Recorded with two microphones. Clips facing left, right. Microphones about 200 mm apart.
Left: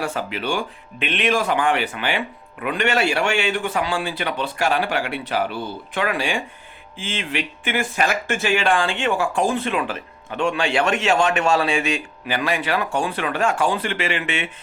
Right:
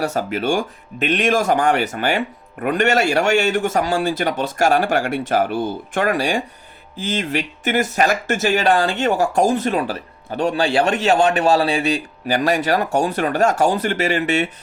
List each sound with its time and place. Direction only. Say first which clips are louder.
0.0 s speech: right 5 dB; 45° right (ahead or behind)